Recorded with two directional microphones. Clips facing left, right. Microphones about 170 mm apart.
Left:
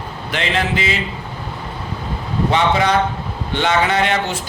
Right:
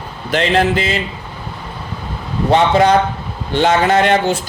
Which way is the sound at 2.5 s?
35° right (ahead or behind).